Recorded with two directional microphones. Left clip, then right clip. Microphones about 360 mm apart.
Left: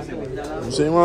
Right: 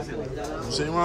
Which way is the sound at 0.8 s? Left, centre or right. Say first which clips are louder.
Left 12 dB; centre.